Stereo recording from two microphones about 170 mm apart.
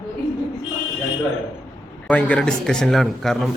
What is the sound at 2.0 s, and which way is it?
Speech, 5° left (ahead or behind).